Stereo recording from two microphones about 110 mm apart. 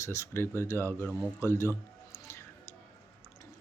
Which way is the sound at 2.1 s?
25° left (ahead or behind).